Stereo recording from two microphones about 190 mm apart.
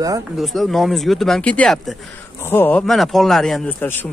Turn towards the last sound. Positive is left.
turn(degrees=10)  # may be behind; listen again after turning